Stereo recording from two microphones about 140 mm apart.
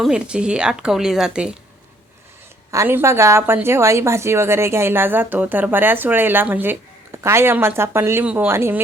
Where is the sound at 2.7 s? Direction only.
20° right (ahead or behind).